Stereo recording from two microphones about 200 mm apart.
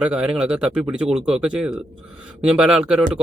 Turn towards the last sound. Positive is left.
turn(degrees=-5)  # may be behind; listen again after turning